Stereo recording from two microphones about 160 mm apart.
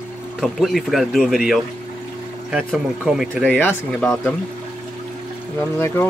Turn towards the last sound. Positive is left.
turn(degrees=15)  # may be behind; listen again after turning